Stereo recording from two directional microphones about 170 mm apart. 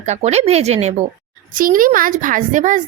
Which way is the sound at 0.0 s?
40° right (ahead or behind).